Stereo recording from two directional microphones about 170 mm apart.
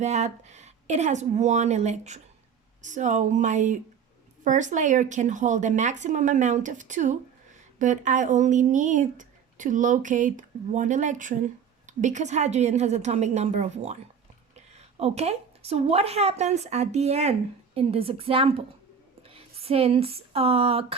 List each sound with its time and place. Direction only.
0.0 s a woman's voice: 40° right (ahead or behind)